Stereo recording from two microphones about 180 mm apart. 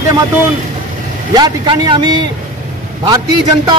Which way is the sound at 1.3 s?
25° right (ahead or behind).